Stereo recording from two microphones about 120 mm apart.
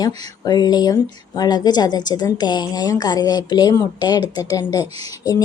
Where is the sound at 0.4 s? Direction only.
35° left (ahead or behind).